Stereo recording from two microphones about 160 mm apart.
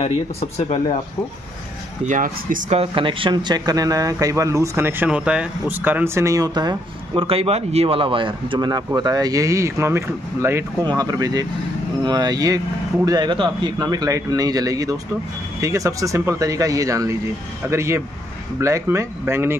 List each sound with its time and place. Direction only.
2.0 s speech: 55° right (ahead or behind)
2.8 s speech: 30° right (ahead or behind); by 19.5 s 15° right (ahead or behind)